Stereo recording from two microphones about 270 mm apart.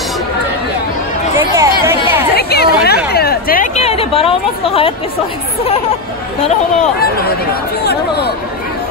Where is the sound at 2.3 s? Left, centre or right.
Left.